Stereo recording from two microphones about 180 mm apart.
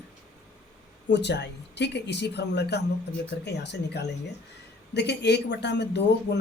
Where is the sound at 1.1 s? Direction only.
70° left (ahead or behind).